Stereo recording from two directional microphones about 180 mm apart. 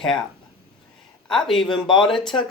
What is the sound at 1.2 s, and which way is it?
Speech, centre (ahead or behind).